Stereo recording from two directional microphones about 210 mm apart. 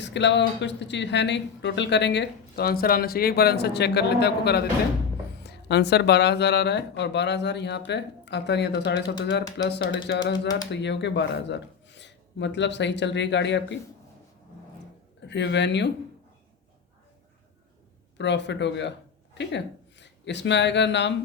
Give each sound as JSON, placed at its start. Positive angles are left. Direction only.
{"t": 0.0, "sound": "speech", "side_deg": 55}
{"t": 15.3, "sound": "speech", "side_deg": 55}
{"t": 18.2, "sound": "speech", "side_deg": 55}